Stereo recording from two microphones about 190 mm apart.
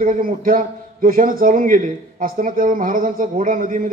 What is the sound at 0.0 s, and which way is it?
A man's voice, 50° right (ahead or behind).